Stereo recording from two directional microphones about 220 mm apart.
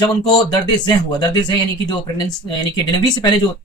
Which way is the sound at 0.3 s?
20° left (ahead or behind).